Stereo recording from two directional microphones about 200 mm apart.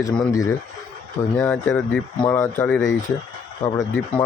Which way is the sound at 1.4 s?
5° left (ahead or behind).